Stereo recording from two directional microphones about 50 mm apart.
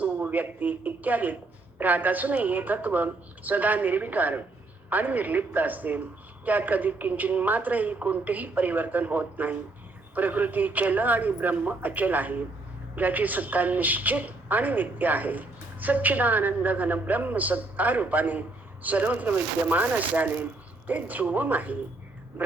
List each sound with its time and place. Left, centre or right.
0.0 s a woman's voice: right